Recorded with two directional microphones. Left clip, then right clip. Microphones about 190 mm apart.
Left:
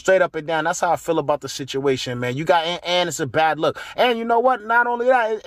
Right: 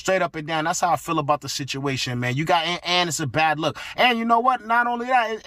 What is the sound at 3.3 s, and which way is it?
Speech, 15° right (ahead or behind).